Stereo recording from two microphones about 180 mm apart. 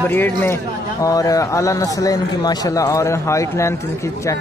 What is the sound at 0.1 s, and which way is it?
A man's voice, 10° left (ahead or behind).